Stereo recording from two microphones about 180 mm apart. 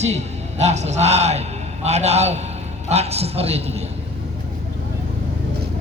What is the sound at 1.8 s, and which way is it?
Speech, 35° right (ahead or behind).